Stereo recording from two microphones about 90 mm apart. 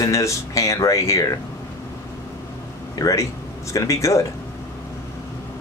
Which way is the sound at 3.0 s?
40° left (ahead or behind).